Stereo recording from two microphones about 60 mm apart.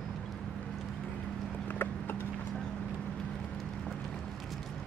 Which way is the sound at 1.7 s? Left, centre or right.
Left.